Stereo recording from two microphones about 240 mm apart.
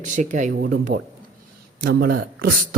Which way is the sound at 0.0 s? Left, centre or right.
Right.